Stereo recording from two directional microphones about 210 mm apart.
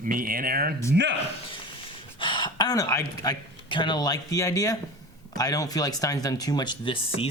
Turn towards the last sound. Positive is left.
turn(degrees=25)  # may be behind; listen again after turning